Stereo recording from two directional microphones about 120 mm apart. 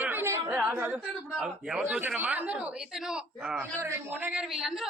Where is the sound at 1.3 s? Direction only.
5° right (ahead or behind).